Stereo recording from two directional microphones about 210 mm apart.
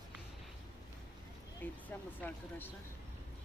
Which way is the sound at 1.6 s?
10° left (ahead or behind).